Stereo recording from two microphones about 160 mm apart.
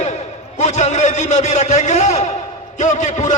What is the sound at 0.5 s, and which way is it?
A man's voice, 45° left (ahead or behind).